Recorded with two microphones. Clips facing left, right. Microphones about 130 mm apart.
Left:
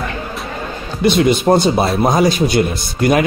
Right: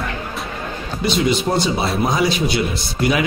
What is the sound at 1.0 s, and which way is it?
Speech, 55° left (ahead or behind).